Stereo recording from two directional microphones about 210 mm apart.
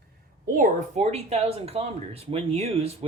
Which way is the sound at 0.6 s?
35° right (ahead or behind).